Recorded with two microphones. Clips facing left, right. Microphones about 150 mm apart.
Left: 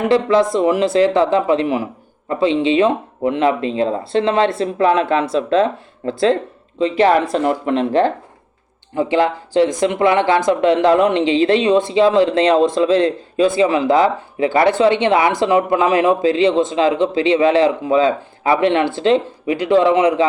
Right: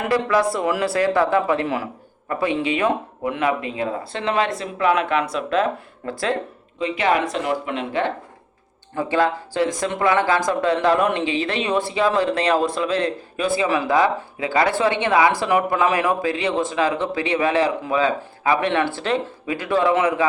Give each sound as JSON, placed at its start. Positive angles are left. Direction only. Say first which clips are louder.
{"t": 0.1, "sound": "speech", "louder": "left 5 dB", "side_deg": 25}
{"t": 9.0, "sound": "speech", "louder": "left 4 dB", "side_deg": 20}